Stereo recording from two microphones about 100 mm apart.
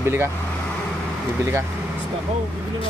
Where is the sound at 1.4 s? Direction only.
25° right (ahead or behind).